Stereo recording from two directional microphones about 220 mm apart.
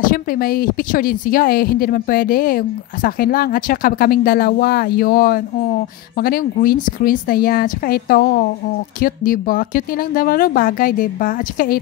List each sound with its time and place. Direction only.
0.0 s speech: 40° left (ahead or behind)